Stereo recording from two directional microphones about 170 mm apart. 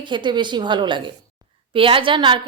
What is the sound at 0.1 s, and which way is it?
A woman's voice, 25° right (ahead or behind).